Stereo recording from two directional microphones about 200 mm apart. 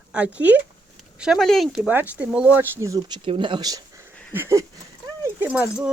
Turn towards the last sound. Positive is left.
turn(degrees=-5)  # may be behind; listen again after turning